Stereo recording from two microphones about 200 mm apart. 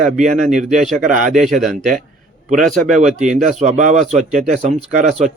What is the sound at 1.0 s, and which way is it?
Speech, 40° right (ahead or behind).